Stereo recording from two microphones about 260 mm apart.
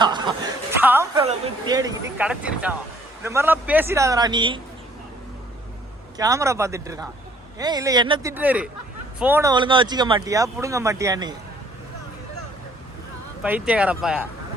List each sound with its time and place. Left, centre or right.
0.0 s chuckle: centre
0.8 s a sound: centre
1.2 s speech: centre
6.1 s speech: centre
13.4 s speech: centre